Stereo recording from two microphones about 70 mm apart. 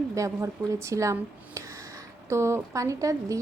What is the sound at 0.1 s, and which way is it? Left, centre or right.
A woman's voice, right.